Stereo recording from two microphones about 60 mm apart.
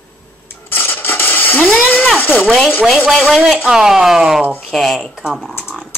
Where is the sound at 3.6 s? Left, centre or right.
Centre.